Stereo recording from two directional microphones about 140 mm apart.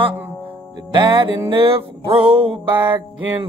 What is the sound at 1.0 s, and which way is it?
Music, 35° right (ahead or behind).